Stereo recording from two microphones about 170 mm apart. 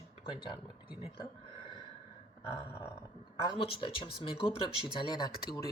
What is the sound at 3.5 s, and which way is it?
A woman's voice, 30° left (ahead or behind).